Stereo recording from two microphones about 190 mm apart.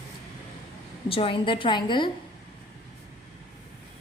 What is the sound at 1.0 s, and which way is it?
A woman's voice, 30° left (ahead or behind).